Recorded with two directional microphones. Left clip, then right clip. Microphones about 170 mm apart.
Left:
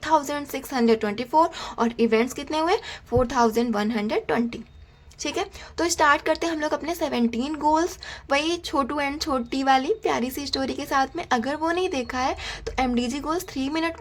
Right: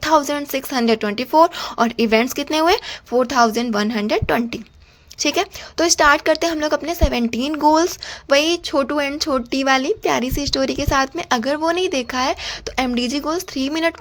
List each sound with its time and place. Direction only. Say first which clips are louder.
0.0 s a woman's voice: right 6 dB; 25° right (ahead or behind)